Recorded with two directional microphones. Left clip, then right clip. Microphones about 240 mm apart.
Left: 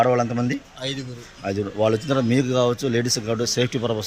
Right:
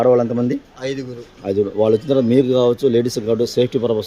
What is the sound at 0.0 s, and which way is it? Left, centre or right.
Speech, centre.